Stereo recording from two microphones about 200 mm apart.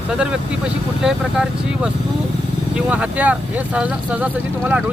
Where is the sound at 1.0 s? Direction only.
5° right (ahead or behind).